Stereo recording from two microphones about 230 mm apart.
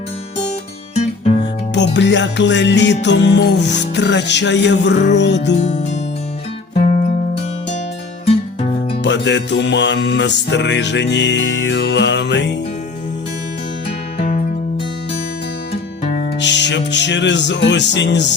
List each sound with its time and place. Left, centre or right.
1.7 s music: left
5.5 s speech: left
9.0 s music: left
14.2 s music: left
16.4 s music: left